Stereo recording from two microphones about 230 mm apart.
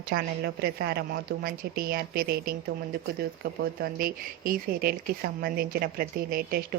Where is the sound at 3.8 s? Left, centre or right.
Right.